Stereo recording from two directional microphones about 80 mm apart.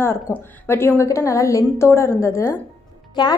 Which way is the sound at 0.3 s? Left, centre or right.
Left.